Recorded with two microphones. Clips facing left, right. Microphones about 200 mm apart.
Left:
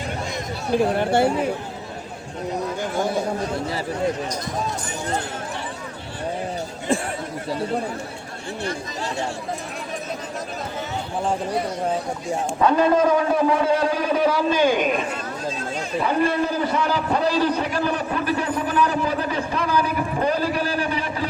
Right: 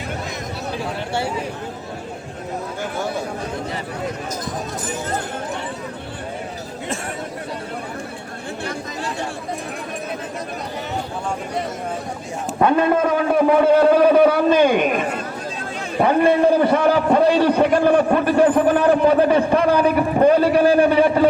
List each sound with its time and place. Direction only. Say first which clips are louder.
0.9 s speech: left 6 dB; 55° left (ahead or behind)
12.5 s a man's voice: right 2 dB; 60° right (ahead or behind)